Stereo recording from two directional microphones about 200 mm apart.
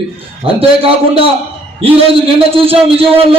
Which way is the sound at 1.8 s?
30° right (ahead or behind).